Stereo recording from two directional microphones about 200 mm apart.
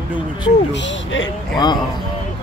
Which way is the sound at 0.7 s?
65° left (ahead or behind).